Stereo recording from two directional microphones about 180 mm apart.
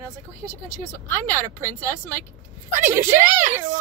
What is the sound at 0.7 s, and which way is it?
Speech, 10° left (ahead or behind).